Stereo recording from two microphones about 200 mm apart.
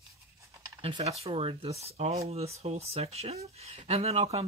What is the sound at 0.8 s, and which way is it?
Speech, 30° right (ahead or behind).